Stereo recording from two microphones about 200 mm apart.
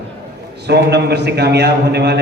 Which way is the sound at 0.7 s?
55° right (ahead or behind).